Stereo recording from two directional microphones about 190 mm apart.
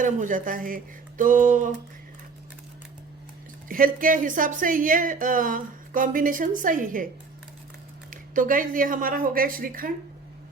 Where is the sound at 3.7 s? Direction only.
45° right (ahead or behind).